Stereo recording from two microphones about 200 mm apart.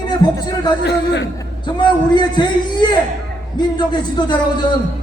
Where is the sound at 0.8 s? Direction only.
60° left (ahead or behind).